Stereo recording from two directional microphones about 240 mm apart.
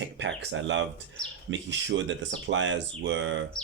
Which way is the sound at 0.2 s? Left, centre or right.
Right.